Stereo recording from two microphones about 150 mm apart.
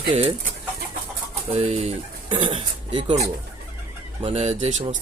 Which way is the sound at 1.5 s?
40° right (ahead or behind).